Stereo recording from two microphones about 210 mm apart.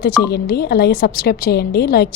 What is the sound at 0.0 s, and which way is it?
Speech, 50° left (ahead or behind).